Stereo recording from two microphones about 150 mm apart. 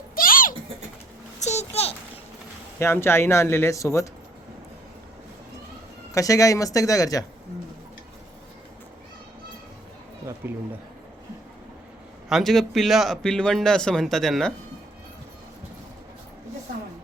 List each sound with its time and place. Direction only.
0.2 s a sound: 70° left (ahead or behind)
1.4 s a sound: 50° left (ahead or behind)
2.7 s speech: 15° left (ahead or behind)
6.1 s speech: 20° left (ahead or behind)
10.4 s speech: 15° right (ahead or behind)
12.3 s speech: centre (ahead or behind)